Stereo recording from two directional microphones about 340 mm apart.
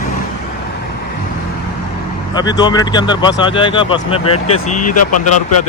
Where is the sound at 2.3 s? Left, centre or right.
Centre.